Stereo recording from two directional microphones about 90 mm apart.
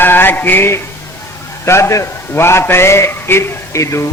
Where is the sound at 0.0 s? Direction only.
25° left (ahead or behind).